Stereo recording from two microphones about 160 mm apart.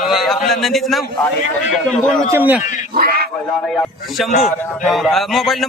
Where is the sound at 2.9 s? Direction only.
65° right (ahead or behind).